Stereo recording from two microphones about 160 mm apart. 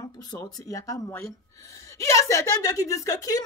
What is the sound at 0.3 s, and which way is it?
A woman's voice, 20° left (ahead or behind).